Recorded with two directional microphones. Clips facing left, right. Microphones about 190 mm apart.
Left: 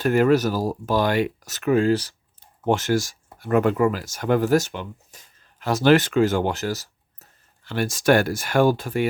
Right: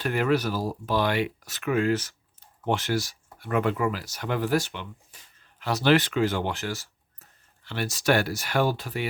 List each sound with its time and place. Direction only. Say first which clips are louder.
0.0 s speech: left 7 dB; 45° left (ahead or behind)
2.6 s speech: left 5 dB; 45° left (ahead or behind)